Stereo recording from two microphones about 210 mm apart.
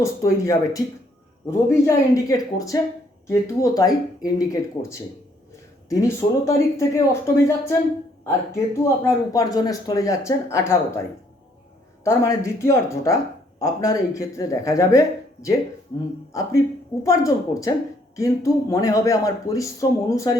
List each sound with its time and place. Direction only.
0.0 s speech: 15° left (ahead or behind)
8.8 s speech: 15° left (ahead or behind)
12.0 s speech: 15° left (ahead or behind)